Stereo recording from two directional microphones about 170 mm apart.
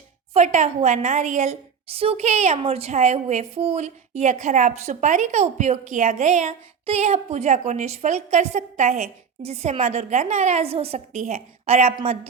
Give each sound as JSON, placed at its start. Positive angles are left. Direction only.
{"t": 0.3, "sound": "a woman's voice", "side_deg": -45}